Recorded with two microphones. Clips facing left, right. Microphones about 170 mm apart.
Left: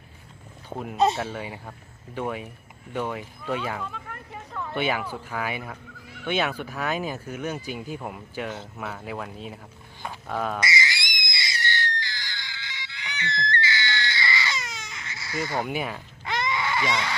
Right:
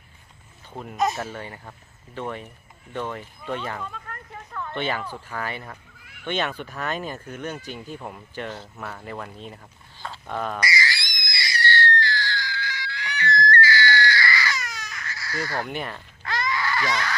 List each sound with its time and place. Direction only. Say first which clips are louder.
0.7 s speech: left 4 dB; 70° left (ahead or behind)
1.2 s speech: left 2 dB; 10° left (ahead or behind)
10.6 s screaming: right 1 dB; 20° left (ahead or behind)
15.6 s speech: left 2 dB; 5° left (ahead or behind)
16.2 s a sound: even; 20° left (ahead or behind)